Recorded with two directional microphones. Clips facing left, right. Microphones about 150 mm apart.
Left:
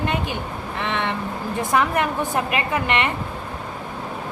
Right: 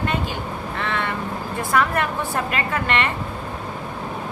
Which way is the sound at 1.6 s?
20° left (ahead or behind).